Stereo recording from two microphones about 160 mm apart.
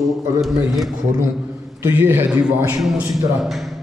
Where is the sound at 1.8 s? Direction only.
15° right (ahead or behind).